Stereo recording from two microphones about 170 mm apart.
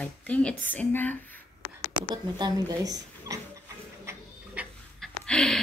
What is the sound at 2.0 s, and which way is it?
Speech, 25° right (ahead or behind).